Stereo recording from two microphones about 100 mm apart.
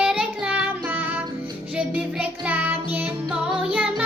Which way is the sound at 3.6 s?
10° right (ahead or behind).